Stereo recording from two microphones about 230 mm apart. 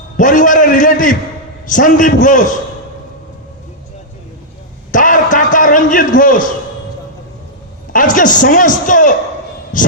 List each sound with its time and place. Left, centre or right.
0.2 s a man's voice: left
4.9 s a sound: left
7.9 s a man's voice: left